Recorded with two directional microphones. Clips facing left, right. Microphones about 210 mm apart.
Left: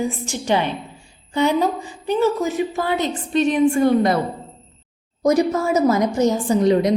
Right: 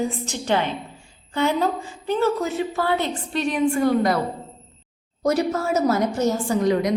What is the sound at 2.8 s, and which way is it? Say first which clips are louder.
A woman's voice: left 1 dB; 15° left (ahead or behind).